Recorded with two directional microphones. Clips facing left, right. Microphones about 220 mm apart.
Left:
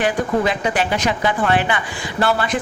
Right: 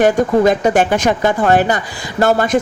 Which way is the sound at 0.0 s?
45° right (ahead or behind).